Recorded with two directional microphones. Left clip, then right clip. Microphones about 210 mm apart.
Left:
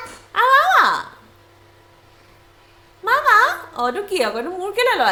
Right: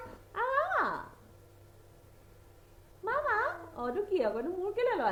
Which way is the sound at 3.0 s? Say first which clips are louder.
Left 17 dB; 20° left (ahead or behind).